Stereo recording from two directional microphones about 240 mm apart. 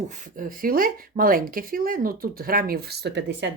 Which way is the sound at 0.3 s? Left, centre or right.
Right.